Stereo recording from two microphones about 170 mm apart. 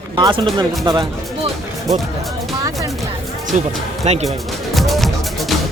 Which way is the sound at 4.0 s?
40° right (ahead or behind).